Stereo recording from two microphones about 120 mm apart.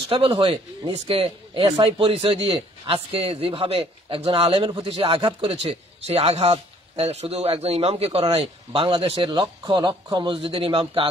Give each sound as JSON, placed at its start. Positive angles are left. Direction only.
{"t": 0.1, "sound": "speech", "side_deg": -50}